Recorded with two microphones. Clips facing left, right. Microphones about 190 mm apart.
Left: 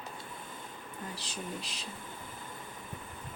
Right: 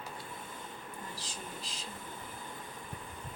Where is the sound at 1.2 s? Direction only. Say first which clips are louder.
Left 4 dB; 70° left (ahead or behind).